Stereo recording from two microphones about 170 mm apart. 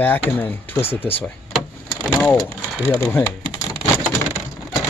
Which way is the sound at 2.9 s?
15° left (ahead or behind).